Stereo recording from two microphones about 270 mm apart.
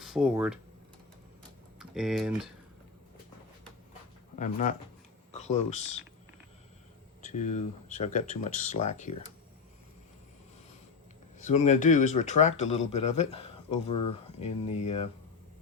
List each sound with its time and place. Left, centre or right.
0.0 s speech: centre
1.8 s speech: centre
4.4 s speech: left
7.3 s speech: left
11.3 s speech: left